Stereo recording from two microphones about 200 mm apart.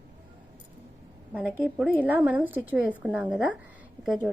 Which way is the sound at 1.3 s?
5° right (ahead or behind).